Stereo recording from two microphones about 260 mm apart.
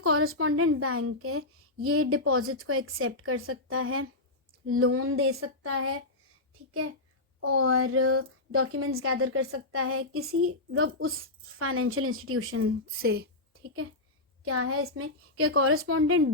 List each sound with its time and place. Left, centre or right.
0.0 s a woman's voice: right
7.4 s a woman's voice: right
13.0 s speech: right
13.5 s a sound: right
14.4 s a woman's voice: right